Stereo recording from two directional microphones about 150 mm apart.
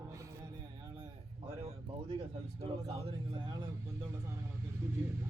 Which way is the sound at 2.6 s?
40° right (ahead or behind).